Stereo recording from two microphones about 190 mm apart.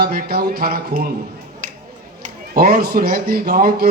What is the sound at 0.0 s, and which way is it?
Speech, 55° right (ahead or behind).